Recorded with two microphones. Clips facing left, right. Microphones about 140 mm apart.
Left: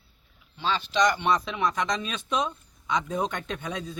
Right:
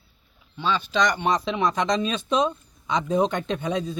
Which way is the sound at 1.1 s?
40° right (ahead or behind).